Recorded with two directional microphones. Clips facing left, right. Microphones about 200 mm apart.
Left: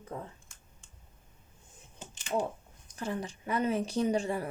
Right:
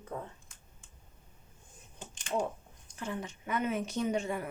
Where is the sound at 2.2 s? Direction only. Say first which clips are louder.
Left 1 dB; 5° left (ahead or behind).